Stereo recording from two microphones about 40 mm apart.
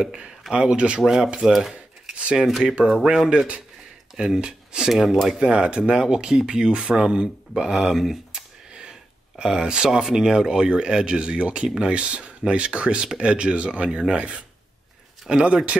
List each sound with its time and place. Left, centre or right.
0.0 s speech: right
1.0 s speech: centre
2.6 s speech: right
4.4 s speech: centre
4.9 s speech: centre
5.4 s speech: right
7.7 s speech: centre
9.4 s speech: right
10.0 s speech: centre; by 15.8 s right